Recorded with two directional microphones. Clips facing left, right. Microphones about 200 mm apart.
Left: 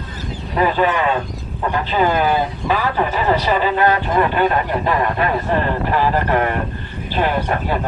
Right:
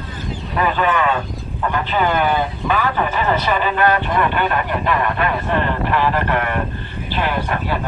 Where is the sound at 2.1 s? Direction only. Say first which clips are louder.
Left 1 dB; 30° left (ahead or behind).